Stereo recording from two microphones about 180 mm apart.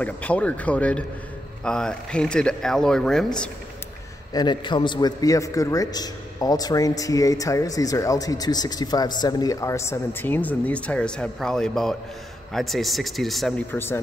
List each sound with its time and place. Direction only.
0.0 s speech: 10° left (ahead or behind)
4.3 s a man's voice: 25° left (ahead or behind)